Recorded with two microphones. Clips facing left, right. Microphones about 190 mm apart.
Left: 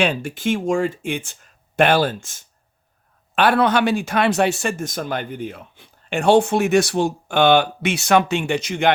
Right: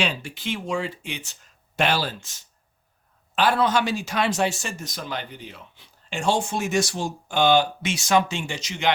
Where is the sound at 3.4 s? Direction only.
60° left (ahead or behind).